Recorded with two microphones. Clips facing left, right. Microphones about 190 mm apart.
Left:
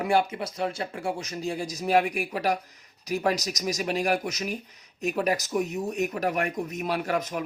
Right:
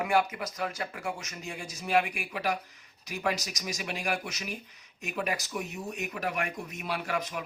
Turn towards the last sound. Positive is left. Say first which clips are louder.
# left 5 dB
turn(degrees=45)  # may be behind; listen again after turning